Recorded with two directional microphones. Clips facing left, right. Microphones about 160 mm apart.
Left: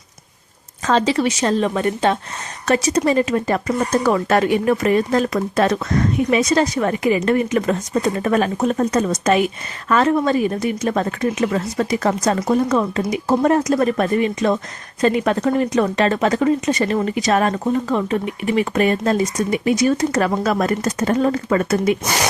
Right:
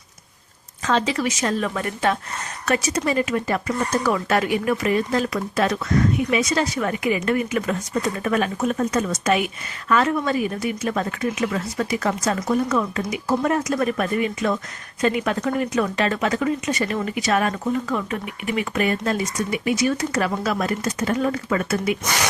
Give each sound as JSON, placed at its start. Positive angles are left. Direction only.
{"t": 0.9, "sound": "a woman's voice", "side_deg": 35}
{"t": 22.0, "sound": "speech", "side_deg": 20}